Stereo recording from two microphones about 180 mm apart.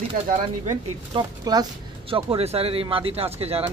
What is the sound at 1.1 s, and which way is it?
Speech, 20° right (ahead or behind).